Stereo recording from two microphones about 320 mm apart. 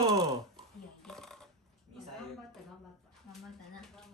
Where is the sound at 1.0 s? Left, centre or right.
Centre.